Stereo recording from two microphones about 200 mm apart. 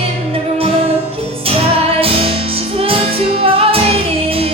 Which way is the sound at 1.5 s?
30° right (ahead or behind).